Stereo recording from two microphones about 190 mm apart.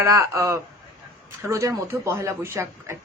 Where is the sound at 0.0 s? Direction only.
15° right (ahead or behind).